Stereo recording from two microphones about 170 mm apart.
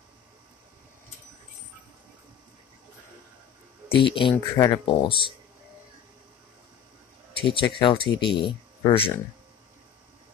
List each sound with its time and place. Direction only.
3.9 s speech: 30° left (ahead or behind)
7.3 s speech: 30° left (ahead or behind)